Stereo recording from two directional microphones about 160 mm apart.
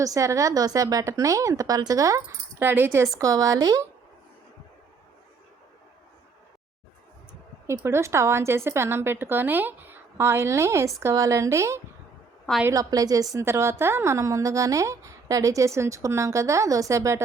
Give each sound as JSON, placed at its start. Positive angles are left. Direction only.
{"t": 0.0, "sound": "a woman's voice", "side_deg": -20}
{"t": 7.7, "sound": "a woman's voice", "side_deg": -15}